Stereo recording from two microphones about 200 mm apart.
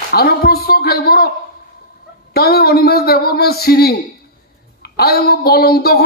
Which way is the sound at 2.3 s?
50° left (ahead or behind).